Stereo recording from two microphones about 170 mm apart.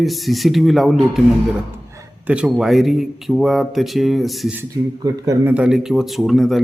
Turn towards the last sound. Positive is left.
turn(degrees=0)  # may be behind; listen again after turning